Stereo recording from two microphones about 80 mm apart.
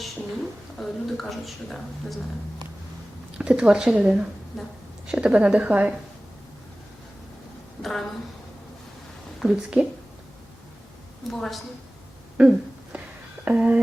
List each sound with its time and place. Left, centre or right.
0.8 s a woman's voice: centre
3.3 s speech: centre
7.8 s a woman's voice: centre
9.4 s speech: centre
11.3 s a woman's voice: centre
12.4 s speech: centre
12.9 s music: centre
13.4 s speech: centre